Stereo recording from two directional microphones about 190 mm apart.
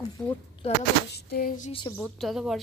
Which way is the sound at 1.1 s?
50° left (ahead or behind).